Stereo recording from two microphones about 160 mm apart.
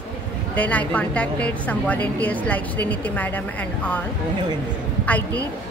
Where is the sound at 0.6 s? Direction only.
10° left (ahead or behind).